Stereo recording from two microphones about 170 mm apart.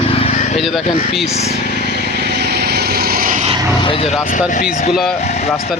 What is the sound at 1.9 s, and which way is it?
Vehicle, 75° right (ahead or behind).